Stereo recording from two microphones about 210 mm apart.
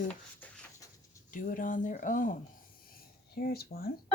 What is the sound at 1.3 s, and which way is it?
Speech, 40° left (ahead or behind).